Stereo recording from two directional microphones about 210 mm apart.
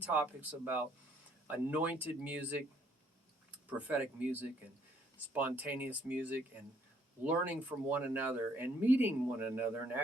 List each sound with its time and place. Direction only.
0.0 s speech: 5° right (ahead or behind)
3.7 s speech: 5° right (ahead or behind)